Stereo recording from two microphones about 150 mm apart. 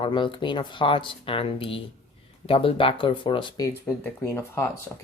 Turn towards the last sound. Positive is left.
turn(degrees=15)  # may be behind; listen again after turning